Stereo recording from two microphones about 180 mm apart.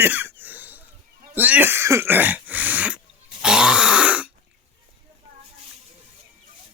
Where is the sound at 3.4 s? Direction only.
5° right (ahead or behind).